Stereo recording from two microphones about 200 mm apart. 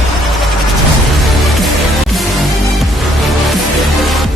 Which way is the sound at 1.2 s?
Centre (ahead or behind).